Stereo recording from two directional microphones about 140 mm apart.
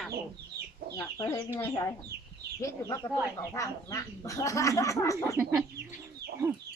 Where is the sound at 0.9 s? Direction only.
20° left (ahead or behind).